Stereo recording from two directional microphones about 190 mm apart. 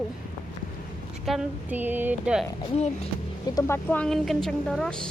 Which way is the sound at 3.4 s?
15° left (ahead or behind).